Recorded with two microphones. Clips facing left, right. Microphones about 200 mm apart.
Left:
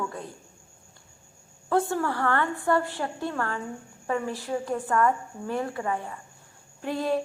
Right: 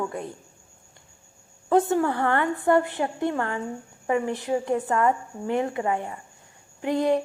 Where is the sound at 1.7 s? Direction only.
20° right (ahead or behind).